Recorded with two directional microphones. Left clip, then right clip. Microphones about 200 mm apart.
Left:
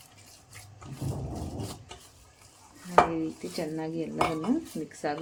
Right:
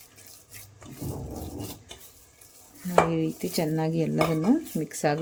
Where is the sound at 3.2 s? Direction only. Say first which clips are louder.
Right 5 dB; 60° right (ahead or behind).